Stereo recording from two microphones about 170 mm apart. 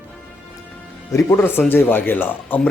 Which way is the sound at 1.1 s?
15° left (ahead or behind).